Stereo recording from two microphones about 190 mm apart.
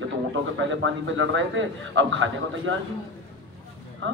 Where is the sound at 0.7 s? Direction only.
85° right.